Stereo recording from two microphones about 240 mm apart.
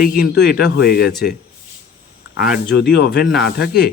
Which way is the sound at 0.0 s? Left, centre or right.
Left.